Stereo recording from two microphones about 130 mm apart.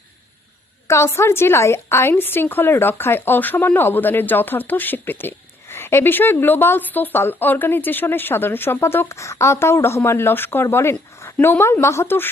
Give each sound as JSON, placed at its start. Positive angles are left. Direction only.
{"t": 0.9, "sound": "a woman's voice", "side_deg": 20}